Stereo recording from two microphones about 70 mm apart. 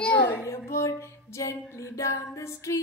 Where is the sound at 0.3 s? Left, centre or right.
Left.